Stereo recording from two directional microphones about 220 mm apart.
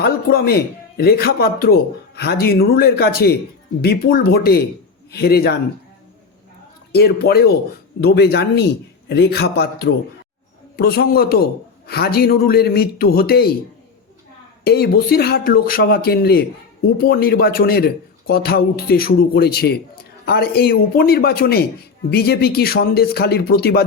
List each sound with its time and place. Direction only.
0.0 s speech: 45° left (ahead or behind)
6.9 s speech: 45° left (ahead or behind)
14.6 s speech: 45° left (ahead or behind)